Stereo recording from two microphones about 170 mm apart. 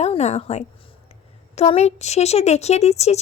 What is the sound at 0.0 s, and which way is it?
A woman's voice, 40° left (ahead or behind).